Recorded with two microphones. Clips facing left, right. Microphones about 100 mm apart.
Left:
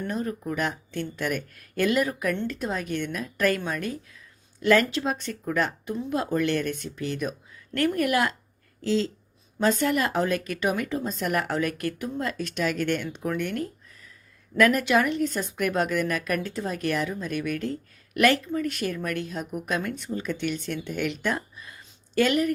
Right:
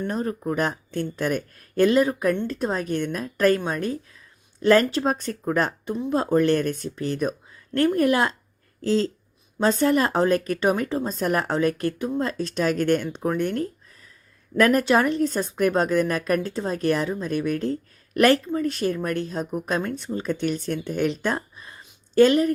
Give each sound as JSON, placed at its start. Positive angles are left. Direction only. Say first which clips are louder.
{"t": 0.1, "sound": "speech", "louder": "right 3 dB", "side_deg": -35}
{"t": 8.8, "sound": "speech", "louder": "right 3 dB", "side_deg": -40}